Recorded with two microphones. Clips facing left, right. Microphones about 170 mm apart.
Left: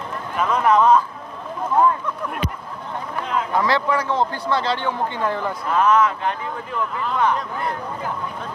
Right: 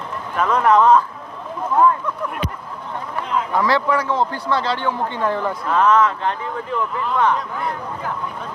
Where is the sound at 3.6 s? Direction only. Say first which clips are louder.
Right 2 dB; 20° left (ahead or behind).